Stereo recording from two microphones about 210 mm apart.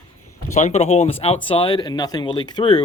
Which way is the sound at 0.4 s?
35° left (ahead or behind).